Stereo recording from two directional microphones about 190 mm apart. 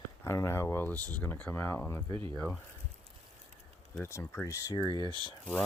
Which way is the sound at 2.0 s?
25° right (ahead or behind).